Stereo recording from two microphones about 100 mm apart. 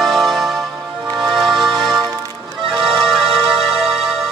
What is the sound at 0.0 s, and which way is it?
Music, centre (ahead or behind).